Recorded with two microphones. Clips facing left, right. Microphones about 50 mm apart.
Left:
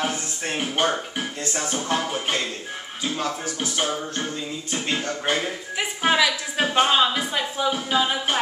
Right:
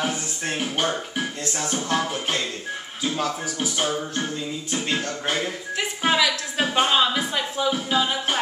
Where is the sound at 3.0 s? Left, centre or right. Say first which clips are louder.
Right 1 dB; centre.